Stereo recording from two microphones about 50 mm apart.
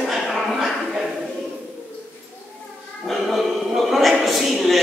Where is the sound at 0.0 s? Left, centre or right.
Centre.